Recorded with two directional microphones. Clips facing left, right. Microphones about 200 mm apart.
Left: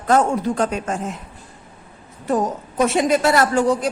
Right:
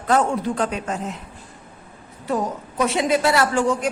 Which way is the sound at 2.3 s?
45° left (ahead or behind).